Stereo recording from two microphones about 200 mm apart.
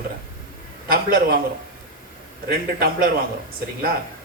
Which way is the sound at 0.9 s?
50° right (ahead or behind).